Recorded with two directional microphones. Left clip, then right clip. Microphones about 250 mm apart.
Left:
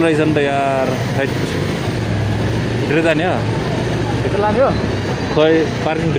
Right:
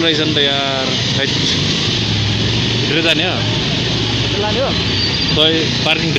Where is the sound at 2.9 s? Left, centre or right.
Centre.